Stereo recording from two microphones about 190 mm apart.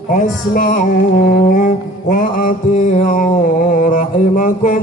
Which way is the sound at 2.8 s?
40° left (ahead or behind).